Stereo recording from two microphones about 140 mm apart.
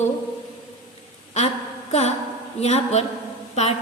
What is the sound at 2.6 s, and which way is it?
Speech, 50° left (ahead or behind).